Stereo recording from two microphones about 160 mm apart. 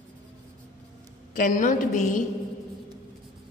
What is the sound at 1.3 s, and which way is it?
Speech, 55° left (ahead or behind).